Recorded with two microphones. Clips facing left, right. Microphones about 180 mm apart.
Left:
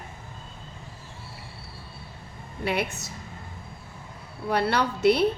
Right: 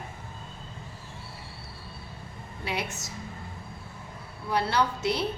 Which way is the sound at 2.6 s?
60° left (ahead or behind).